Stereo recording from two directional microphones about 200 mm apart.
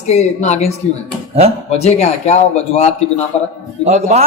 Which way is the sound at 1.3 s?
30° right (ahead or behind).